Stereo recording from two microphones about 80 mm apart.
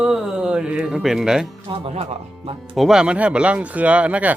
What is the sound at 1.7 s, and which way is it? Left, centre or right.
Speech, right.